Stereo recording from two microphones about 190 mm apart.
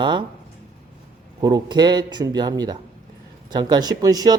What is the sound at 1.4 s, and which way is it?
Speech, 20° right (ahead or behind).